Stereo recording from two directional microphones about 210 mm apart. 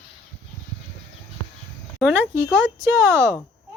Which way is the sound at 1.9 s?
5° right (ahead or behind).